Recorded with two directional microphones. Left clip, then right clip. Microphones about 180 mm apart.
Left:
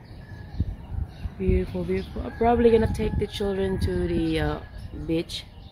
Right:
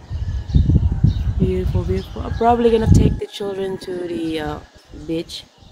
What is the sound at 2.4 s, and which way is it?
Speech, 15° right (ahead or behind).